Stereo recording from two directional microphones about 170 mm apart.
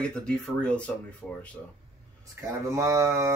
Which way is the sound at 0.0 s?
5° left (ahead or behind).